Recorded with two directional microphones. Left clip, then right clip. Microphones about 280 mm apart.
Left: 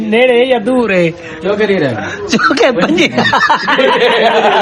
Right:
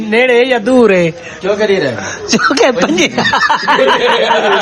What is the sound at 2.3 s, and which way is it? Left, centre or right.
Speech, centre.